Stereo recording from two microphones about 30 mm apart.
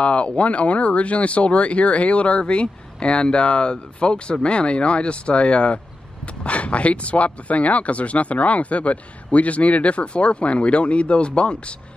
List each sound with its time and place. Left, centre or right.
0.0 s speech: left